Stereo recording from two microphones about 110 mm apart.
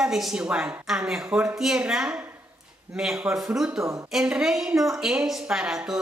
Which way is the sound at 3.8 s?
30° right (ahead or behind).